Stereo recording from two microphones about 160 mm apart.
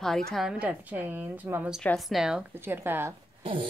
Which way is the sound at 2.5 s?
15° right (ahead or behind).